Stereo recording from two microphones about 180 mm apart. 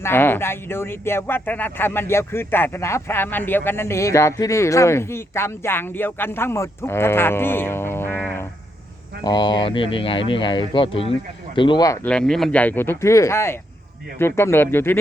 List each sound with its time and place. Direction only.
0.0 s speech: 10° left (ahead or behind)
9.2 s speech: 25° left (ahead or behind)
12.0 s speech: 5° left (ahead or behind)